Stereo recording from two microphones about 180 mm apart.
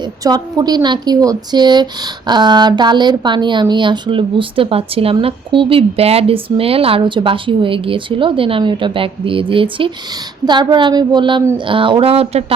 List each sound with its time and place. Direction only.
0.3 s speech: 20° right (ahead or behind)